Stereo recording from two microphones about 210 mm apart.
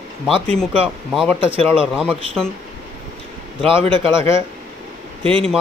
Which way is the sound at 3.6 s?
25° right (ahead or behind).